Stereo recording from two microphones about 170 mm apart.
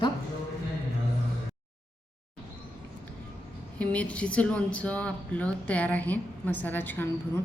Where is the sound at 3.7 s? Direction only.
5° left (ahead or behind).